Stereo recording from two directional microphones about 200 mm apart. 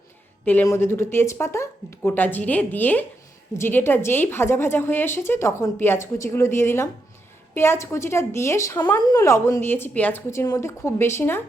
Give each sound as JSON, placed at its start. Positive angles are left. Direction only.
{"t": 0.4, "sound": "a woman's voice", "side_deg": 10}